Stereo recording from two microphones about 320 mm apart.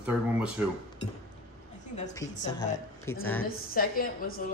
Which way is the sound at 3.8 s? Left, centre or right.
Left.